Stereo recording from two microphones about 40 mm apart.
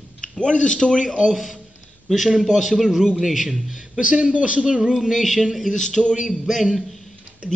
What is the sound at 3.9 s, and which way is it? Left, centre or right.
A man's voice, right.